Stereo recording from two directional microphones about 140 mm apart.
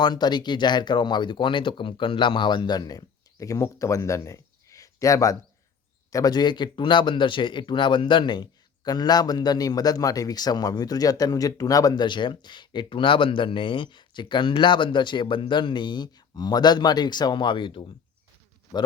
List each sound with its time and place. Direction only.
0.0 s speech: 30° left (ahead or behind)